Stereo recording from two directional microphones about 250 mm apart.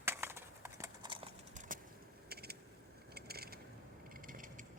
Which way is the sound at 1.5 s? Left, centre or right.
Right.